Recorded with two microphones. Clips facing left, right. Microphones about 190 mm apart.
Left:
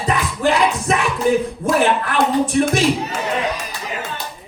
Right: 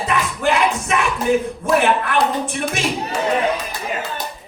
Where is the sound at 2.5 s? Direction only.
35° left (ahead or behind).